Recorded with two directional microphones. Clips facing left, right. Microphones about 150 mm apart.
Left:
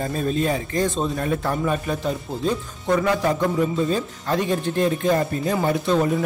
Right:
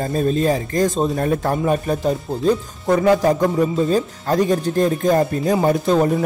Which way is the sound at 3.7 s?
40° right (ahead or behind).